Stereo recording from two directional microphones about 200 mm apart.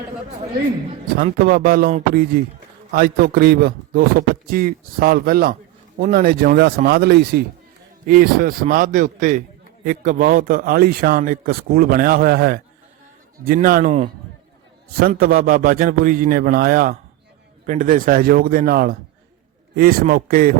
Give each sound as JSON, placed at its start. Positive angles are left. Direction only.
{"t": 1.2, "sound": "a man's voice", "side_deg": -45}
{"t": 14.9, "sound": "a man's voice", "side_deg": -45}